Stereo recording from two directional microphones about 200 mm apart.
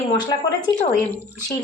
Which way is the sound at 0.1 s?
20° left (ahead or behind).